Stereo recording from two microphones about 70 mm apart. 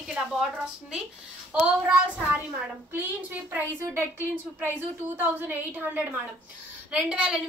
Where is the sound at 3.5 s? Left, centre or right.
Right.